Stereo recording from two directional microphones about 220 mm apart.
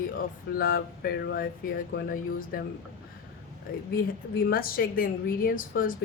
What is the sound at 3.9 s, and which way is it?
A woman's voice, 40° left (ahead or behind).